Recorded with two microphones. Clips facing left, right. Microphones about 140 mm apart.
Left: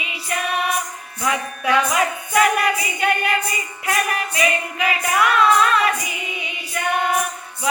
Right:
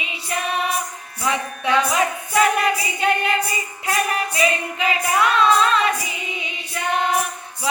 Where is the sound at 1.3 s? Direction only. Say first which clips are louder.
Even; 25° right (ahead or behind).